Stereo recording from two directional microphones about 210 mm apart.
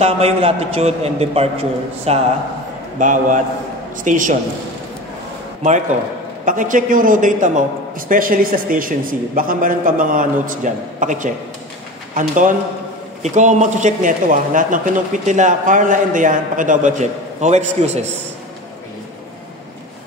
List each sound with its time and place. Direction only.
0.0 s a man's voice: 30° right (ahead or behind)
6.4 s speech: 40° right (ahead or behind)